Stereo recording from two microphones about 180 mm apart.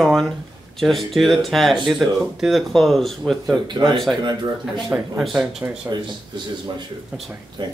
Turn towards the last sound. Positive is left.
turn(degrees=-25)  # may be behind; listen again after turning